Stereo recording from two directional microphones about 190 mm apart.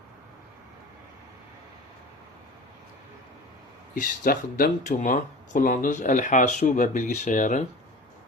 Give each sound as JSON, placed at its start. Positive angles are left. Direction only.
{"t": 4.2, "sound": "speech", "side_deg": 50}